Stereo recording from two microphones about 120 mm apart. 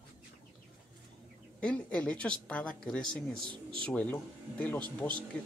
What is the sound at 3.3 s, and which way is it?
Speech, 45° right (ahead or behind).